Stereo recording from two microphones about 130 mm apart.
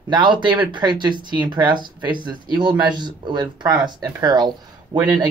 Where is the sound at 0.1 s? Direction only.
35° right (ahead or behind).